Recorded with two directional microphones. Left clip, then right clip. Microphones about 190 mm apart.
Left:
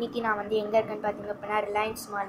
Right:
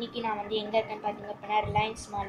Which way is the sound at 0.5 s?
35° left (ahead or behind).